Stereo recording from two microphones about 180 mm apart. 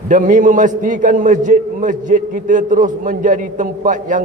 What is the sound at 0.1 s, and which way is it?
A man's voice, 45° right (ahead or behind).